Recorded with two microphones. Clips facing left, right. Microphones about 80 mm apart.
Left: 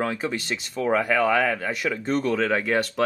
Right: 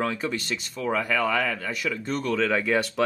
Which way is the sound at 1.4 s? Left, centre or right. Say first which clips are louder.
Left 4 dB; left.